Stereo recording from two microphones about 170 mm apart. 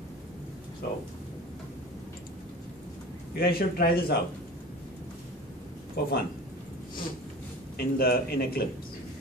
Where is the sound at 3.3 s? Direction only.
65° left (ahead or behind).